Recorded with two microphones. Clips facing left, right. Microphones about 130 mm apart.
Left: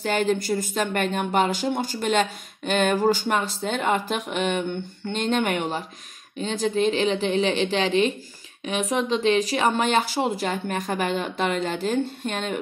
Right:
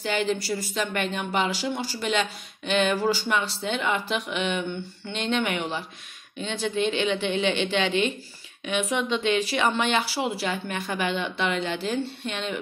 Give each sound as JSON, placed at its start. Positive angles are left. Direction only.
{"t": 0.0, "sound": "speech", "side_deg": 45}